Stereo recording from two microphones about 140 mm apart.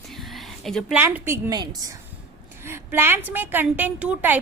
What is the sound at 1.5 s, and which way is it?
Speech, 30° right (ahead or behind).